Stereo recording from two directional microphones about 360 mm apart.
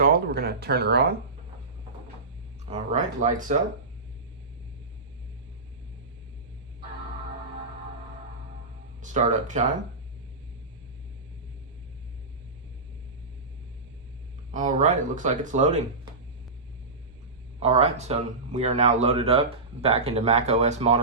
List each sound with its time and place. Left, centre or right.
0.0 s speech: right
2.6 s speech: centre
9.0 s speech: centre
14.5 s speech: right
17.6 s speech: centre